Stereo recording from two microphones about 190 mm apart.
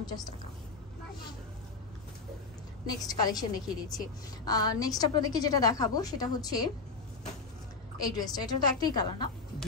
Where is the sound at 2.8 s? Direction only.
20° left (ahead or behind).